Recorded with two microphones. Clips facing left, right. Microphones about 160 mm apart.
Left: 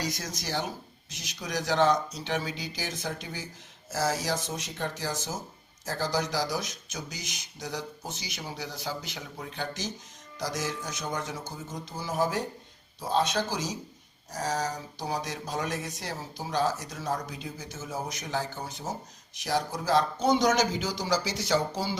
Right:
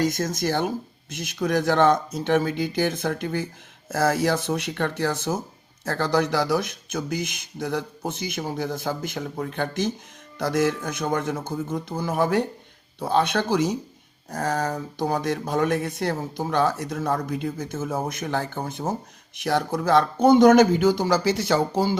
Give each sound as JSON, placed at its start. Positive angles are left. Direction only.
{"t": 0.0, "sound": "speech", "side_deg": -50}